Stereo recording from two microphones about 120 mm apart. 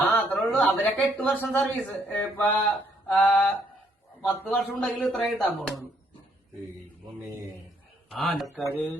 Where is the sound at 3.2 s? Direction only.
5° left (ahead or behind).